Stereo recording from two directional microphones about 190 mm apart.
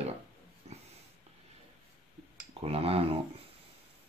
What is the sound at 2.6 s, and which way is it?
Speech, 30° right (ahead or behind).